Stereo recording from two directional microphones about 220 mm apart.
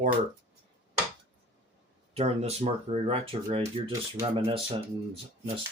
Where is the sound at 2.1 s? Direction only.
30° right (ahead or behind).